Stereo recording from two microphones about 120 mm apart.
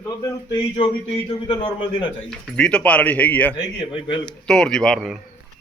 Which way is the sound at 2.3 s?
5° left (ahead or behind).